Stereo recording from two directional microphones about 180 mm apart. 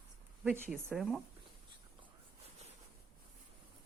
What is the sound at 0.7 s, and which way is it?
Speech, 5° right (ahead or behind).